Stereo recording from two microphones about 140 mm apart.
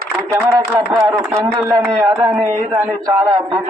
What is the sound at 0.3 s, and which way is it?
A man's voice, 20° right (ahead or behind).